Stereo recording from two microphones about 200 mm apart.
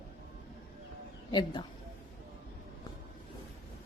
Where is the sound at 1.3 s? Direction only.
25° left (ahead or behind).